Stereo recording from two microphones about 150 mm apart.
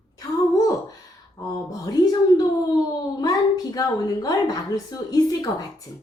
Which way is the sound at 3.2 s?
25° left (ahead or behind).